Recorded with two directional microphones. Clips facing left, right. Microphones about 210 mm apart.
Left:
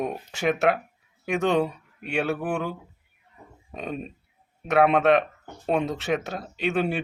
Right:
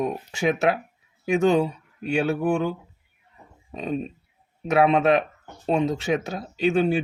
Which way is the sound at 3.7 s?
Centre (ahead or behind).